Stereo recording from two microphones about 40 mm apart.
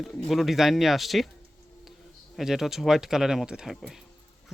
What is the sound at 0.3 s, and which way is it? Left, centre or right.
Speech, centre.